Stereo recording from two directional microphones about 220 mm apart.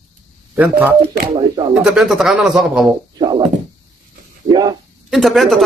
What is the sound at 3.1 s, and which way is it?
Speech, 20° right (ahead or behind).